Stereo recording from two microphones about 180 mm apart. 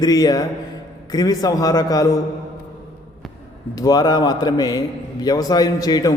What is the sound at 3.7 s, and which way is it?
A man's voice, 20° left (ahead or behind).